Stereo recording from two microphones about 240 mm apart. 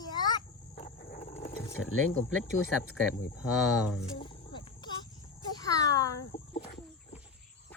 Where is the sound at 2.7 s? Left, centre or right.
Centre.